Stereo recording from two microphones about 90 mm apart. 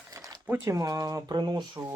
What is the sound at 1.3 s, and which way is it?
Speech, 55° right (ahead or behind).